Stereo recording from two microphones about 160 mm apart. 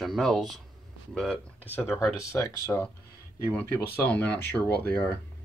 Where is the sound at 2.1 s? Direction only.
20° left (ahead or behind).